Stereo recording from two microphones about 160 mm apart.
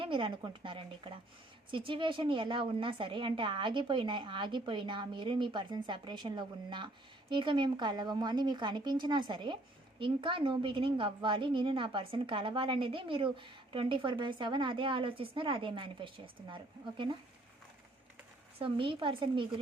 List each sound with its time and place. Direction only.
0.0 s a woman's voice: 30° right (ahead or behind)
18.6 s a woman's voice: 30° right (ahead or behind)